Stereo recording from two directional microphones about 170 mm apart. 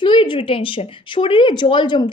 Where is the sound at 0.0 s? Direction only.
30° left (ahead or behind).